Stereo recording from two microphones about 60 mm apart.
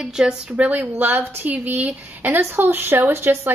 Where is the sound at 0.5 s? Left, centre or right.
Right.